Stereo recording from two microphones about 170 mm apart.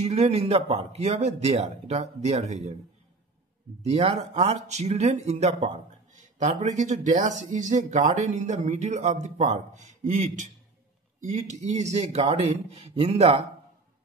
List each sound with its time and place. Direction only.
0.0 s speech: 40° right (ahead or behind)
3.9 s speech: 35° right (ahead or behind)